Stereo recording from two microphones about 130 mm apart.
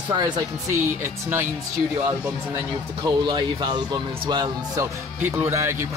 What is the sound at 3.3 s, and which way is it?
Speech, 35° right (ahead or behind).